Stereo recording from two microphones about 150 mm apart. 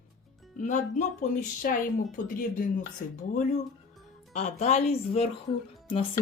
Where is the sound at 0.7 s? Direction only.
50° left (ahead or behind).